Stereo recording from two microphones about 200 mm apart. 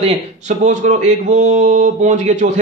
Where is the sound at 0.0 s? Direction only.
30° right (ahead or behind).